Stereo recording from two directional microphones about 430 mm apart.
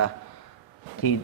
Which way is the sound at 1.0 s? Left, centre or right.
Left.